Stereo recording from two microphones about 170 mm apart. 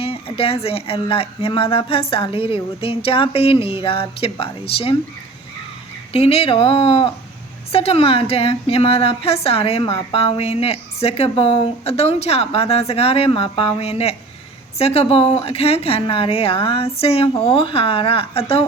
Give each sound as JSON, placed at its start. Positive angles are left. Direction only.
{"t": 0.0, "sound": "a woman's voice", "side_deg": 35}
{"t": 6.1, "sound": "a woman's voice", "side_deg": 35}